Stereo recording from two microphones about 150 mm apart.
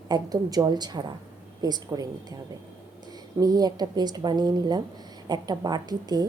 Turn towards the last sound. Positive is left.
turn(degrees=-25)  # may be behind; listen again after turning